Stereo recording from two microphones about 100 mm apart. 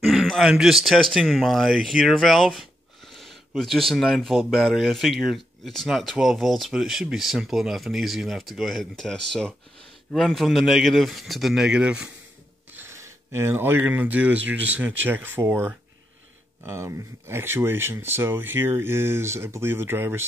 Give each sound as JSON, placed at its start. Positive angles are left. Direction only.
{"t": 0.0, "sound": "a man's voice", "side_deg": 0}
{"t": 12.7, "sound": "speech", "side_deg": -25}